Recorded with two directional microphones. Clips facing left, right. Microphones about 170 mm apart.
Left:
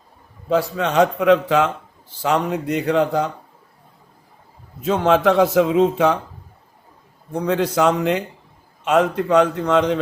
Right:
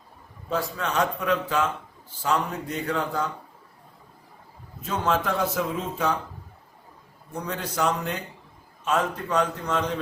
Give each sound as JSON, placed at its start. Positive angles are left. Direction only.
{"t": 0.4, "sound": "a man's voice", "side_deg": 80}
{"t": 4.8, "sound": "a man's voice", "side_deg": 90}
{"t": 7.3, "sound": "a man's voice", "side_deg": 85}
{"t": 8.8, "sound": "a man's voice", "side_deg": 80}